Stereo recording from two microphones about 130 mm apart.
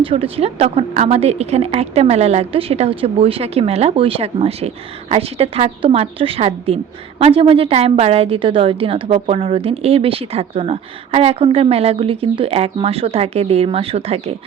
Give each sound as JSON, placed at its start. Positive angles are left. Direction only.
{"t": 0.0, "sound": "a woman's voice", "side_deg": -45}